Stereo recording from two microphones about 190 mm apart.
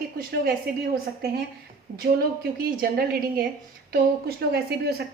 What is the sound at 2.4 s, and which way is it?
A woman's voice, 50° right (ahead or behind).